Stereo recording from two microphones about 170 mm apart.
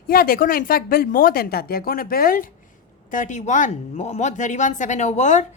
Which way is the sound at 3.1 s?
50° left (ahead or behind).